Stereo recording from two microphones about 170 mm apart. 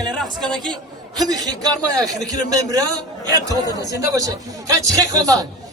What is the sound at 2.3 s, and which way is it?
A man's voice, 20° right (ahead or behind).